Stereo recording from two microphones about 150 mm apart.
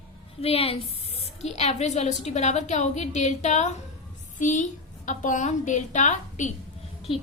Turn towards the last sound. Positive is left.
turn(degrees=35)  # may be behind; listen again after turning